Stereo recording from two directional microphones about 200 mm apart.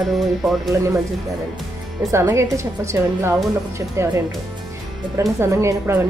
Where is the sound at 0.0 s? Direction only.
Centre (ahead or behind).